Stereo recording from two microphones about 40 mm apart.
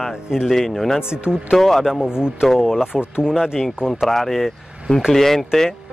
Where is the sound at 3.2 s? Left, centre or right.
Centre.